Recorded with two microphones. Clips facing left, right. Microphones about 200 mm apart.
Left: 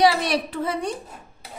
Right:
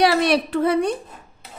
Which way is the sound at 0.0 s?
65° right (ahead or behind).